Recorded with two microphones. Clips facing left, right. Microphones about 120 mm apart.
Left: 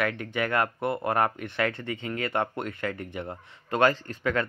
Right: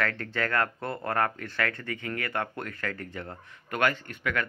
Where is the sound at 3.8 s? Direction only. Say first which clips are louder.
Left 4 dB; 35° left (ahead or behind).